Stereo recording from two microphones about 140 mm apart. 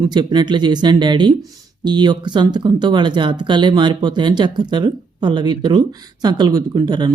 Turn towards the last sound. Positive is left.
turn(degrees=-30)  # may be behind; listen again after turning